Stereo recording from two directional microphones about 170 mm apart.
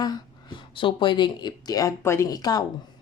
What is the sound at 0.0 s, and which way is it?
Speech, 25° left (ahead or behind).